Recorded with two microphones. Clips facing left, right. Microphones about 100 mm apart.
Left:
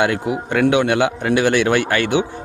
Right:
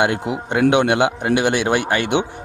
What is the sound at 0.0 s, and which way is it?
A man's voice, 20° right (ahead or behind).